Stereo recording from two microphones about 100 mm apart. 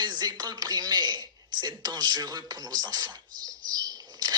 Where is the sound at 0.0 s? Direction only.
45° right (ahead or behind).